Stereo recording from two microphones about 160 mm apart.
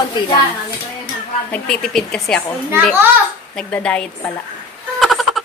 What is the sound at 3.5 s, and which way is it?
Speech, 5° left (ahead or behind).